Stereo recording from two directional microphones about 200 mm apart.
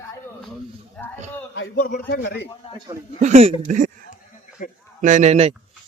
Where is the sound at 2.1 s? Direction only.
60° left (ahead or behind).